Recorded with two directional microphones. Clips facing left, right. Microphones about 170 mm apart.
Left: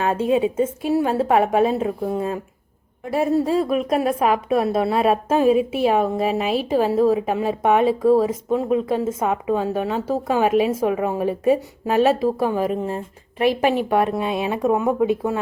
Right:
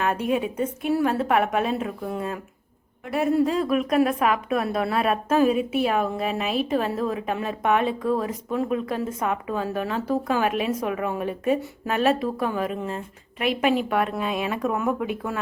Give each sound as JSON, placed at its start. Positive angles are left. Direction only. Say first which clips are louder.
{"t": 0.0, "sound": "speech", "louder": "left 5 dB", "side_deg": 25}